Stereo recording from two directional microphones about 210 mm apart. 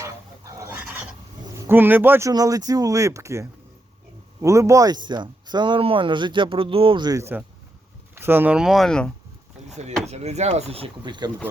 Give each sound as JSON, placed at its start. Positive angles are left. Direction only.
{"t": 0.6, "sound": "dog", "side_deg": -10}
{"t": 1.5, "sound": "speech", "side_deg": -10}
{"t": 9.6, "sound": "speech", "side_deg": -30}